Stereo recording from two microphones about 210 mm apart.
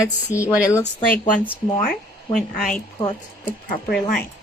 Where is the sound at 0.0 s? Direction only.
15° left (ahead or behind).